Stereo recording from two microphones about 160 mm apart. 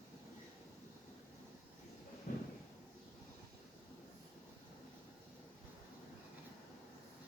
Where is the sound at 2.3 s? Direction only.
60° left (ahead or behind).